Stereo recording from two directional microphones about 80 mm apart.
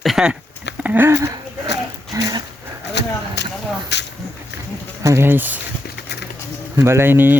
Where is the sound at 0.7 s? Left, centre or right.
Right.